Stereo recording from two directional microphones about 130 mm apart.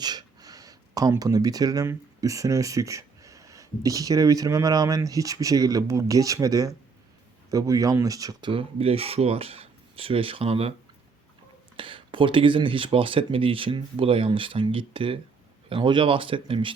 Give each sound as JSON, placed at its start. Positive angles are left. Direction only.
{"t": 0.0, "sound": "speech", "side_deg": -30}
{"t": 11.8, "sound": "speech", "side_deg": -40}